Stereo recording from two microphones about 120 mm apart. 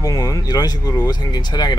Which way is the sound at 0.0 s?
30° left (ahead or behind).